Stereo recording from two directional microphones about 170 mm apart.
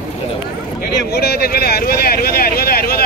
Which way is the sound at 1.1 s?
70° left (ahead or behind).